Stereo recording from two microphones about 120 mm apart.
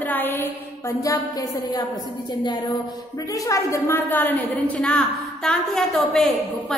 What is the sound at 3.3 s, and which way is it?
A woman's voice, 25° left (ahead or behind).